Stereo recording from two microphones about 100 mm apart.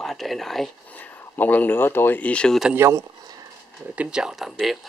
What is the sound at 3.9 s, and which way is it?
Speech, 10° right (ahead or behind).